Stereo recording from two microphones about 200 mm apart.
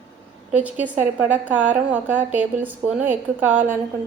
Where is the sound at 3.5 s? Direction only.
40° right (ahead or behind).